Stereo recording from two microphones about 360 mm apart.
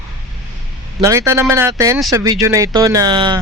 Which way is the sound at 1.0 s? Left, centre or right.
Centre.